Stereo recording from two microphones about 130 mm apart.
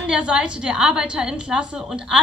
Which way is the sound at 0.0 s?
5° right (ahead or behind).